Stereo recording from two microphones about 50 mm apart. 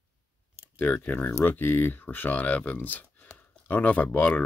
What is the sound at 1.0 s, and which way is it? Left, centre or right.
Speech, left.